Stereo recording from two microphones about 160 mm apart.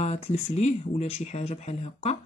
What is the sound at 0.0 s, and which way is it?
Speech, 45° left (ahead or behind).